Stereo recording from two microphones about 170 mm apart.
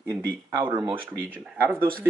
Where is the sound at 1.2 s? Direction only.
15° right (ahead or behind).